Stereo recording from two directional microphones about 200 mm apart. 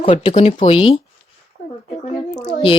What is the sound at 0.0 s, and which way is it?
Speech, 30° left (ahead or behind).